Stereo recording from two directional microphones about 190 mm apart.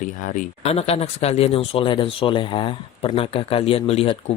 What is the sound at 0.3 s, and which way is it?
Speech, 35° left (ahead or behind).